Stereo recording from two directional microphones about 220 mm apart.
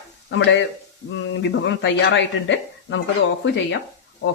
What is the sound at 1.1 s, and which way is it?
Speech, 55° left (ahead or behind).